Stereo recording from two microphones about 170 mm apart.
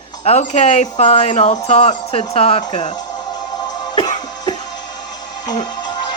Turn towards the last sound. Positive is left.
turn(degrees=25)  # may be behind; listen again after turning